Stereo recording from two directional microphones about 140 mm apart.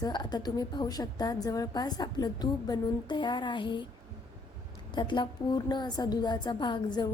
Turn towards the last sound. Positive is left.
turn(degrees=30)  # may be behind; listen again after turning